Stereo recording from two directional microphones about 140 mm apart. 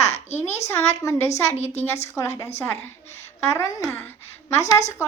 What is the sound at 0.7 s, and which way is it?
Speech, 20° left (ahead or behind).